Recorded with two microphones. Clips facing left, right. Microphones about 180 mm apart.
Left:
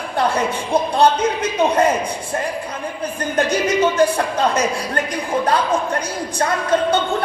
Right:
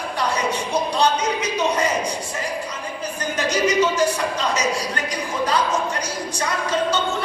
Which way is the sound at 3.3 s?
55° left (ahead or behind).